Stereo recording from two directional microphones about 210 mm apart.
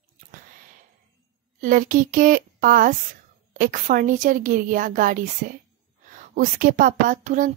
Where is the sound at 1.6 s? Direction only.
40° right (ahead or behind).